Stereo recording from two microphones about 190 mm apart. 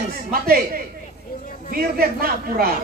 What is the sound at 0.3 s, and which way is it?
A woman's voice, 50° right (ahead or behind).